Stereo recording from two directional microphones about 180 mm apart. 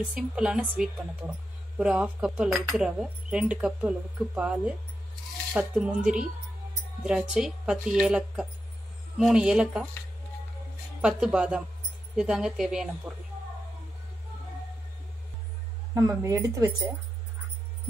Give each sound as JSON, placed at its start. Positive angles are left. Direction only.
{"t": 0.1, "sound": "a woman's voice", "side_deg": -5}
{"t": 11.0, "sound": "speech", "side_deg": -5}
{"t": 15.9, "sound": "a woman's voice", "side_deg": -15}